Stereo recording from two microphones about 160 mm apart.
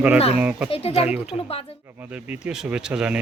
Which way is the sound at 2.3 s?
5° right (ahead or behind).